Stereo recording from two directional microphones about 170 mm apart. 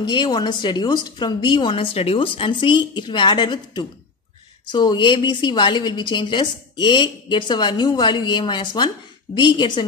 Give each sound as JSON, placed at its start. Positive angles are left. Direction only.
{"t": 0.0, "sound": "a woman's voice", "side_deg": 25}